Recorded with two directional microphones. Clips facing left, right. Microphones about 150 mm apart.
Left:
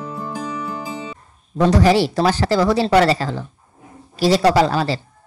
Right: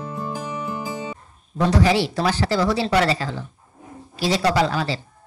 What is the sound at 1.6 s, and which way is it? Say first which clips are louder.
A man's voice: left 4 dB; 45° left (ahead or behind).